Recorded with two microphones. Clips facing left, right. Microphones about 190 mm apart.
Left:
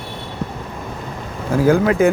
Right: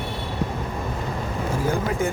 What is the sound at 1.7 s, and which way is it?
Speech, 80° left.